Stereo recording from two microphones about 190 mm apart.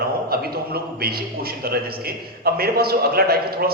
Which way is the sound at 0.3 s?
55° right (ahead or behind).